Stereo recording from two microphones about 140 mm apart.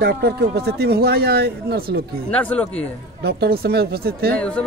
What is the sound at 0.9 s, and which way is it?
Speech, 90° right.